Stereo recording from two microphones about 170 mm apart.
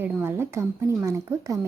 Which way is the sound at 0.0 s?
15° right (ahead or behind).